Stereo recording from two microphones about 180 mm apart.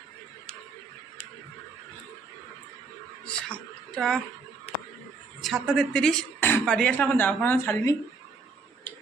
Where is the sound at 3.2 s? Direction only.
5° left (ahead or behind).